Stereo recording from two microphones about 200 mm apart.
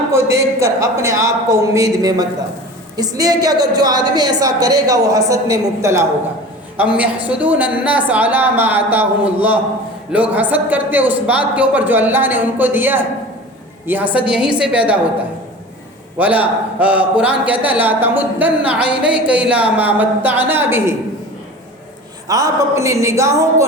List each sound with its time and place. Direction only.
0.1 s a man's voice: 15° right (ahead or behind)
16.1 s a man's voice: 5° right (ahead or behind)
22.3 s a man's voice: 15° right (ahead or behind)